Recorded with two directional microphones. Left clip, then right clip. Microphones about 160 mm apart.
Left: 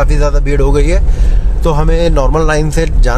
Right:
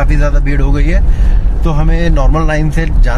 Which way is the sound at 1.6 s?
45° left (ahead or behind).